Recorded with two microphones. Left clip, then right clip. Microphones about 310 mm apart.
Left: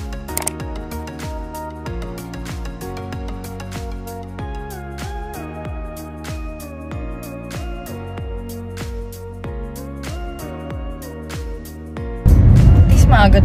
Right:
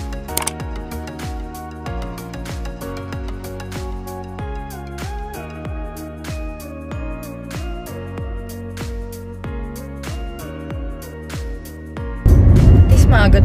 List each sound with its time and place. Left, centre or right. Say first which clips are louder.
12.2 s music: right 1 dB; centre